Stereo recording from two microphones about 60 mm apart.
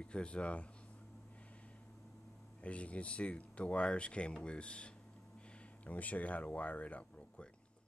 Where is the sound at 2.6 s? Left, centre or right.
Left.